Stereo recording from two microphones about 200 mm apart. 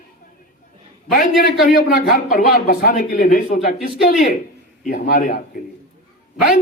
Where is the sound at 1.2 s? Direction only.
45° left (ahead or behind).